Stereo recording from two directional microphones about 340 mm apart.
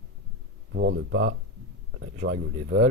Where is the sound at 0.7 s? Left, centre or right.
Right.